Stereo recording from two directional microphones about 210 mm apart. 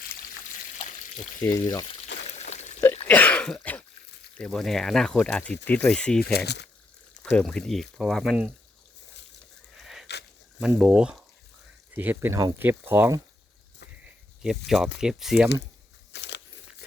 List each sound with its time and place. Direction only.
1.4 s speech: 15° left (ahead or behind)
2.2 s a sound: 30° left (ahead or behind)
3.1 s cough: 5° left (ahead or behind)
4.4 s speech: 5° left (ahead or behind)
6.3 s speech: 50° left (ahead or behind)
7.2 s speech: 5° left (ahead or behind)
9.7 s a sound: centre (ahead or behind)
10.8 s speech: 5° right (ahead or behind)
14.7 s speech: centre (ahead or behind)
16.1 s a sound: 55° left (ahead or behind)